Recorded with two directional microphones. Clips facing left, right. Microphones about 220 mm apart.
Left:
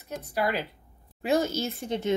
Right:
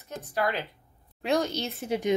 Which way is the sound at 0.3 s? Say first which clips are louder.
Left 1 dB; 10° left (ahead or behind).